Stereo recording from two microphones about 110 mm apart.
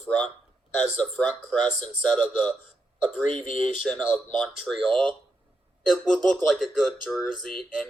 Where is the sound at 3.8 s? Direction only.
Centre (ahead or behind).